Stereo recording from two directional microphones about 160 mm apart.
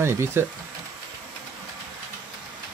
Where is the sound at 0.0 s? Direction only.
15° right (ahead or behind).